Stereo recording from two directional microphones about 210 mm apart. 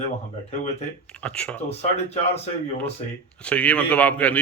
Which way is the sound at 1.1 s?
5° left (ahead or behind).